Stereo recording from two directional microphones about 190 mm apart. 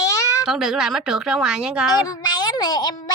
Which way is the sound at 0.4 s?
Centre (ahead or behind).